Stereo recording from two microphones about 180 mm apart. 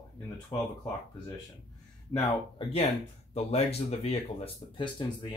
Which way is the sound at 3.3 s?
35° left (ahead or behind).